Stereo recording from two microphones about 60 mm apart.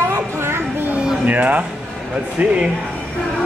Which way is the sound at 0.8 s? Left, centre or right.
Right.